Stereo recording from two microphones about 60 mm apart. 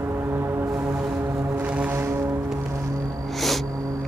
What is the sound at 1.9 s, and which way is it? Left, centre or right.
Foghorn, right.